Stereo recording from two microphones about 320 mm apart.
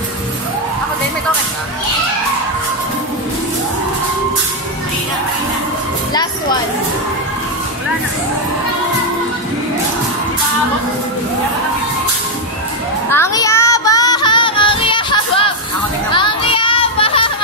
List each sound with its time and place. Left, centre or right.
13.1 s child singing: centre
16.1 s music: centre